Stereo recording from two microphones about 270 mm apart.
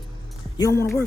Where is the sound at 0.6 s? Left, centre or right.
Centre.